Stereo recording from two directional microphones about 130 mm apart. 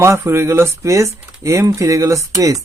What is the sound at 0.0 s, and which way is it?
Speech, 20° right (ahead or behind).